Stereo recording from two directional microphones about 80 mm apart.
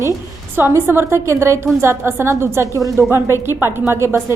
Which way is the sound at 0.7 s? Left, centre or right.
Right.